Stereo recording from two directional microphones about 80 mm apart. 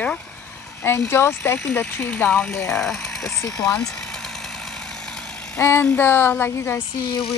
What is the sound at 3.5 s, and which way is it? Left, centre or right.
Speech, left.